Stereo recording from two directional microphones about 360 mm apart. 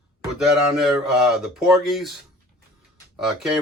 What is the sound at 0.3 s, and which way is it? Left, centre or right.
Speech, centre.